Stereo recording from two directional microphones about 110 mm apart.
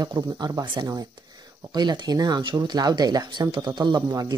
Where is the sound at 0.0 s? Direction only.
35° right (ahead or behind).